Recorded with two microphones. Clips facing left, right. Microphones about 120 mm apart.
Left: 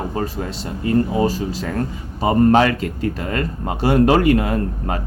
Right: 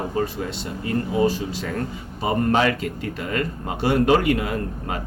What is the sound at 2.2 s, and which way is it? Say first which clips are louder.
Speech: left 6 dB; 40° left (ahead or behind).